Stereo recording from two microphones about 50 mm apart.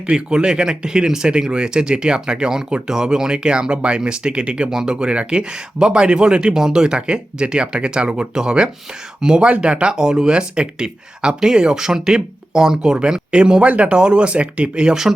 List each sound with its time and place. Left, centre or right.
0.1 s speech: centre